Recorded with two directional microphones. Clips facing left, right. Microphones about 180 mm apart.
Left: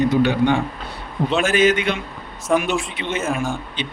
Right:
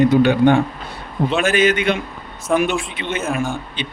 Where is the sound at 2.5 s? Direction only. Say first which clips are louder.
Right 1 dB; centre (ahead or behind).